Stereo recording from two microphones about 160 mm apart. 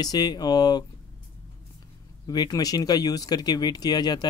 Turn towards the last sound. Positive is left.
turn(degrees=25)  # may be behind; listen again after turning